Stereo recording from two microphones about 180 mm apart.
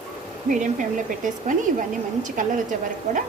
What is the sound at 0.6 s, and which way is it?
Speech, 45° right (ahead or behind).